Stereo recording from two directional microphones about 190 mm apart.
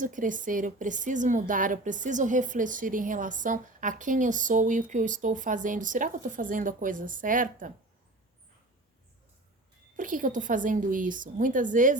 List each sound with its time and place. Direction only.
0.0 s a woman's voice: 45° right (ahead or behind)
10.0 s a woman's voice: 45° right (ahead or behind)